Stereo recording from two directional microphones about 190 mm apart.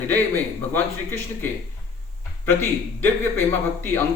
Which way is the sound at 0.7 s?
10° left (ahead or behind).